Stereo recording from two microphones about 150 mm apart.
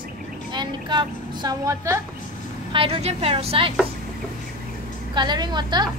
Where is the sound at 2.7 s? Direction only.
40° right (ahead or behind).